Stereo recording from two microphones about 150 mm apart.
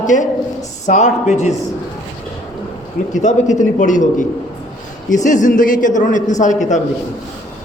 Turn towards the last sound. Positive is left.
turn(degrees=55)  # may be behind; listen again after turning